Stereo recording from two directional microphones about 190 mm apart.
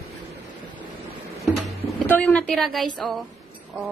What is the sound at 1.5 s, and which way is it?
Music, centre (ahead or behind).